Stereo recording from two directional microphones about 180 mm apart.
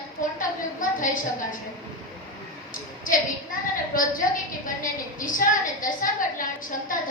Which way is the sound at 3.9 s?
50° left (ahead or behind).